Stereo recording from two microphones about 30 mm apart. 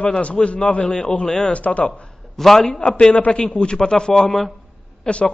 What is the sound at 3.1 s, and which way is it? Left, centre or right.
Speech, left.